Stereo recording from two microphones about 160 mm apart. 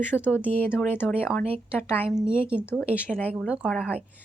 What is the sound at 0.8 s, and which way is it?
Speech, 10° left (ahead or behind).